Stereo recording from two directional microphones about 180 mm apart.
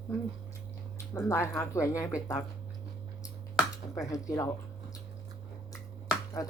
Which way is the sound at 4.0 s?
20° left (ahead or behind).